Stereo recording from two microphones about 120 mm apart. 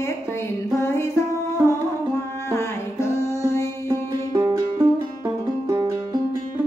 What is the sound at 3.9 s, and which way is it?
Music, 25° right (ahead or behind).